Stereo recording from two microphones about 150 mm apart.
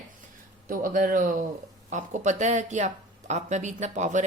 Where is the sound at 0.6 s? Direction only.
65° right (ahead or behind).